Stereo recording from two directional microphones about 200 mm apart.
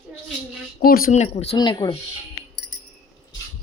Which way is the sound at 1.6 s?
20° left (ahead or behind).